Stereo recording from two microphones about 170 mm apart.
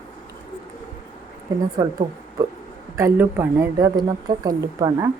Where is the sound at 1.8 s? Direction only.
20° right (ahead or behind).